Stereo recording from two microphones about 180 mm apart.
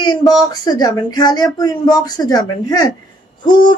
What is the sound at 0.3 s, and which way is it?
A woman's voice, 20° left (ahead or behind).